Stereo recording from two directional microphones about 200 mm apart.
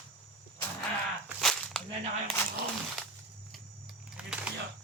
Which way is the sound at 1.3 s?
Centre (ahead or behind).